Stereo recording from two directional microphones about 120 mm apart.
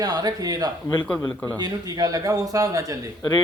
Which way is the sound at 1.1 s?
10° left (ahead or behind).